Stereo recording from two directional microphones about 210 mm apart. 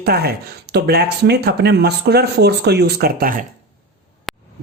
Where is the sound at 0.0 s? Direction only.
50° right (ahead or behind).